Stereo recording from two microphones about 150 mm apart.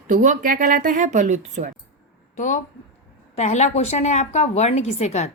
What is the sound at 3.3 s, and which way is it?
A woman's voice, 50° left (ahead or behind).